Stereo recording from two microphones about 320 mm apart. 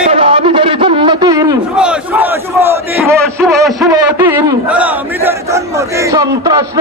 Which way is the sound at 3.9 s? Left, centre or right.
Centre.